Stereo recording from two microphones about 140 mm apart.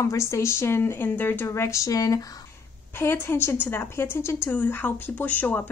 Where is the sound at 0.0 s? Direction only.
20° left (ahead or behind).